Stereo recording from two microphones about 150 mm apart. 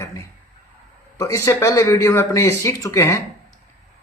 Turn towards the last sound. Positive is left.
turn(degrees=20)  # may be behind; listen again after turning